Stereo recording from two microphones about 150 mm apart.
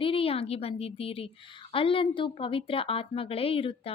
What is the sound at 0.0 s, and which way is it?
A woman's voice, 40° left (ahead or behind).